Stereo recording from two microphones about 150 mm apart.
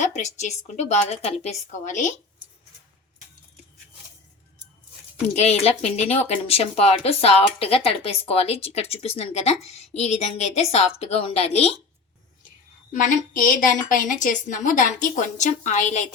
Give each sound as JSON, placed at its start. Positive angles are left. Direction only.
{"t": 0.0, "sound": "speech", "side_deg": 50}
{"t": 5.3, "sound": "speech", "side_deg": 45}
{"t": 12.9, "sound": "a woman's voice", "side_deg": 60}